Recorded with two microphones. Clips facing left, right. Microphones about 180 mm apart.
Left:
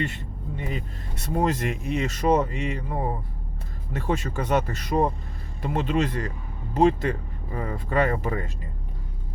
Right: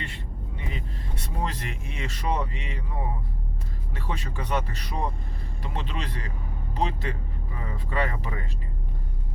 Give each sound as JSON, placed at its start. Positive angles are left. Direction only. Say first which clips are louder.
{"t": 0.0, "sound": "speech", "louder": "left 8 dB", "side_deg": 45}